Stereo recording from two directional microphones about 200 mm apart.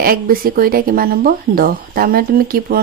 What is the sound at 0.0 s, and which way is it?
Speech, 45° right (ahead or behind).